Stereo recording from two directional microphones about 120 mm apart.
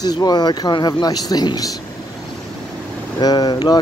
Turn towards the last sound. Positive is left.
turn(degrees=35)  # may be behind; listen again after turning